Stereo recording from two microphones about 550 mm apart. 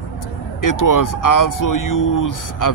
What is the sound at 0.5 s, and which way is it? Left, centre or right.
Speech, left.